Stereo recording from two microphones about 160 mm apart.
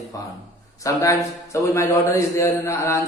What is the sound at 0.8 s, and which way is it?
A man's voice, 20° left (ahead or behind).